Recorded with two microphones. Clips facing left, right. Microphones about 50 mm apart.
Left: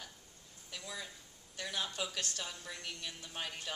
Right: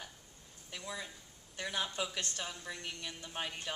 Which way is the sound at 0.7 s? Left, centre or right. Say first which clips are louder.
Right 2 dB; right.